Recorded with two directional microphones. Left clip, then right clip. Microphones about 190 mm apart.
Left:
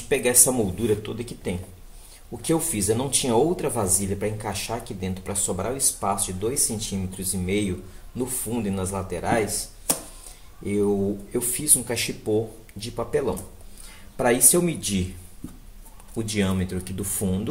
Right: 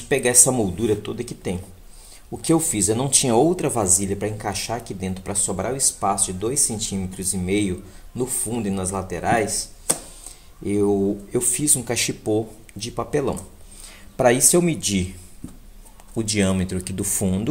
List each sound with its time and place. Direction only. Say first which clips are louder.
0.1 s speech: right 3 dB; 40° right (ahead or behind)
16.2 s speech: right 4 dB; 40° right (ahead or behind)